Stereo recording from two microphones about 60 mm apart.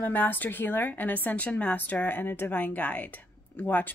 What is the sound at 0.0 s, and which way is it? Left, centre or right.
A woman's voice, left.